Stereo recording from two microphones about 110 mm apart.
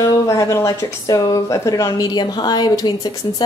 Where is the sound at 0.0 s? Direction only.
30° left (ahead or behind).